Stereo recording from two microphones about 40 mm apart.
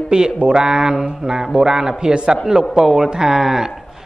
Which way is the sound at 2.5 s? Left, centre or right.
Centre.